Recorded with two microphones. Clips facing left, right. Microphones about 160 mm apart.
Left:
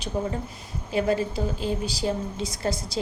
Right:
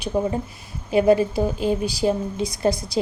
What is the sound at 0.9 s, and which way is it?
A woman's voice, 15° right (ahead or behind).